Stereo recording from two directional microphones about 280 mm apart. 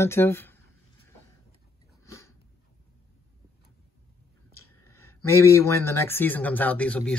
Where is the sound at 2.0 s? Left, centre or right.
Centre.